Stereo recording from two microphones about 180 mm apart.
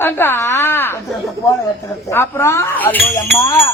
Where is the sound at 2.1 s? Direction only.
15° left (ahead or behind).